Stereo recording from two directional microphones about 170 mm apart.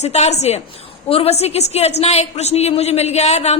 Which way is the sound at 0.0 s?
40° left (ahead or behind).